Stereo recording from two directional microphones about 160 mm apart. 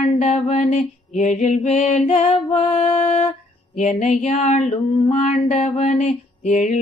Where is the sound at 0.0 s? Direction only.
40° left (ahead or behind).